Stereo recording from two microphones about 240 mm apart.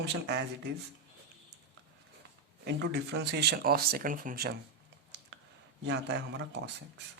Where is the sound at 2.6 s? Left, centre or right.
Right.